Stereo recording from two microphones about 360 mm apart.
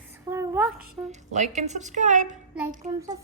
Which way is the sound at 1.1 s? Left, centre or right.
Centre.